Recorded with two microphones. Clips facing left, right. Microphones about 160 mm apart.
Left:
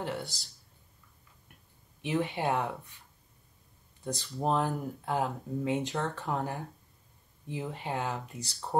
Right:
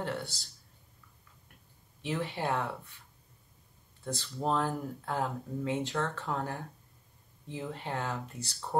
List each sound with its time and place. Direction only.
0.0 s speech: 15° left (ahead or behind)
2.0 s speech: 15° left (ahead or behind)
4.0 s speech: 15° left (ahead or behind)